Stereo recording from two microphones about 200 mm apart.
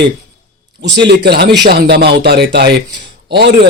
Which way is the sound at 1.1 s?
55° right (ahead or behind).